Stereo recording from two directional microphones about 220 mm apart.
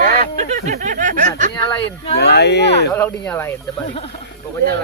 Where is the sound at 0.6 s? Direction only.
30° right (ahead or behind).